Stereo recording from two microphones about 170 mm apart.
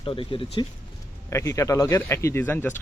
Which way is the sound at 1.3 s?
15° left (ahead or behind).